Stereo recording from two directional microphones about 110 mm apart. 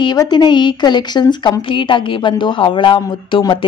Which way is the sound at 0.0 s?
40° left (ahead or behind).